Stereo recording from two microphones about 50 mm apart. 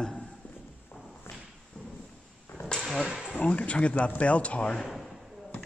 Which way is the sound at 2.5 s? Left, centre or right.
Left.